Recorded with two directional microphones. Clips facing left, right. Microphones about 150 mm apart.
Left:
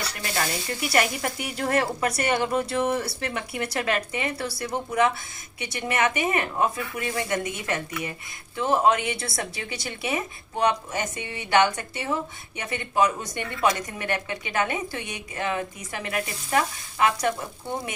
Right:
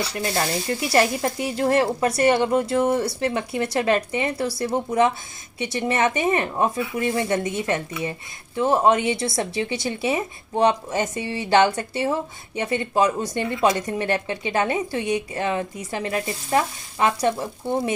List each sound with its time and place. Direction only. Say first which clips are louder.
0.1 s speech: right 5 dB; 25° right (ahead or behind)